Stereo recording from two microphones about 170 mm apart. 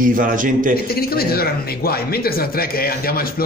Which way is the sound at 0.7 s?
65° left (ahead or behind).